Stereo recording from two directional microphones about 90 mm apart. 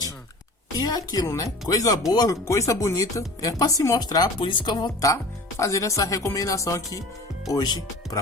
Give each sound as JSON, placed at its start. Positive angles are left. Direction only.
{"t": 0.8, "sound": "a woman's voice", "side_deg": 45}
{"t": 4.4, "sound": "speech", "side_deg": 65}
{"t": 5.0, "sound": "speech", "side_deg": 35}